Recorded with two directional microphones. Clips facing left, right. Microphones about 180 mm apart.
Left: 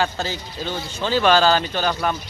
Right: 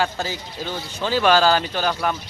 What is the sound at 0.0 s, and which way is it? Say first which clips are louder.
A man's voice: even; 10° right (ahead or behind).